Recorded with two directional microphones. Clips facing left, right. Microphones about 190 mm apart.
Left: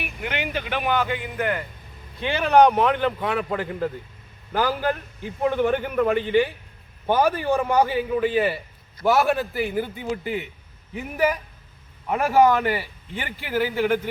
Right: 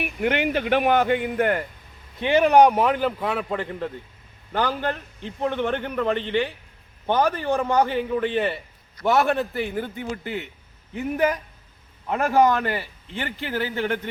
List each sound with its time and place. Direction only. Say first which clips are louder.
0.0 s speech: right 6 dB; 55° right (ahead or behind)
2.2 s a man's voice: right 1 dB; 15° right (ahead or behind); by 14.1 s 10° left (ahead or behind)